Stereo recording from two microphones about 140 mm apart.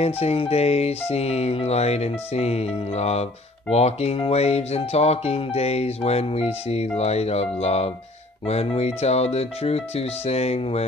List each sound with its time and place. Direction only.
0.0 s speech: 45° left (ahead or behind)